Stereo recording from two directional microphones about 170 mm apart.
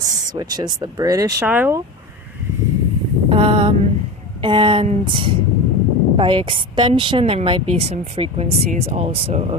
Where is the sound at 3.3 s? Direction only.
30° right (ahead or behind).